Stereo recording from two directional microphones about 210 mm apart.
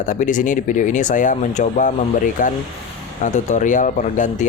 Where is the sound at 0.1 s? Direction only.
35° left (ahead or behind).